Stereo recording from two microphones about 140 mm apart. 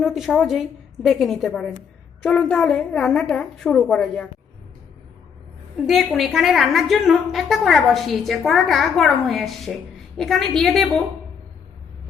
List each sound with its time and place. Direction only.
0.0 s a woman's voice: centre (ahead or behind)
2.2 s a woman's voice: 10° left (ahead or behind)
5.7 s a woman's voice: centre (ahead or behind)